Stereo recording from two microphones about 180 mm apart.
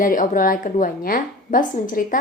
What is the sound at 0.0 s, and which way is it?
A woman's voice, 50° left (ahead or behind).